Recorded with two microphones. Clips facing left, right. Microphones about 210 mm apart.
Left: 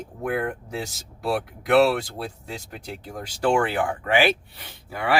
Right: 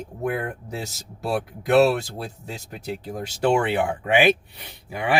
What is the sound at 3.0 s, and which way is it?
Speech, 25° right (ahead or behind).